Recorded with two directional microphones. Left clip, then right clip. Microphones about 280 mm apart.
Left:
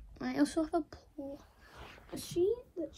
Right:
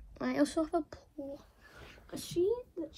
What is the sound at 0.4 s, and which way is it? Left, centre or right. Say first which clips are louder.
A woman's voice: even; left.